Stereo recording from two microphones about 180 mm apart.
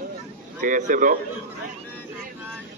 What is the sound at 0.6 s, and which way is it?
Speech, 45° right (ahead or behind).